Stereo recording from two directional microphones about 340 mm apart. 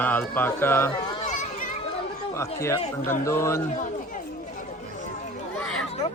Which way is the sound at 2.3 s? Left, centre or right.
Centre.